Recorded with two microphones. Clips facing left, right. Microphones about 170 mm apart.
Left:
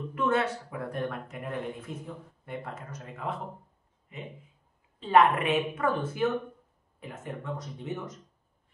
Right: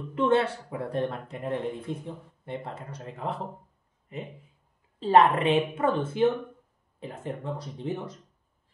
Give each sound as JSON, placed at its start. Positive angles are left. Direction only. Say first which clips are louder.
{"t": 0.1, "sound": "speech", "louder": "right 4 dB", "side_deg": -30}